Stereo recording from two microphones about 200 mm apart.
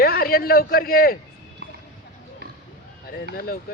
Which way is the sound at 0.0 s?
50° left (ahead or behind).